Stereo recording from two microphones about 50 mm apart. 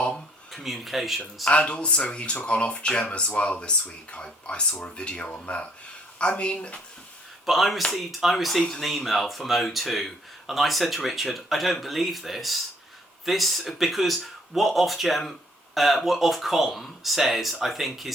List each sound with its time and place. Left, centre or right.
0.5 s speech: centre
1.5 s speech: left
7.4 s speech: centre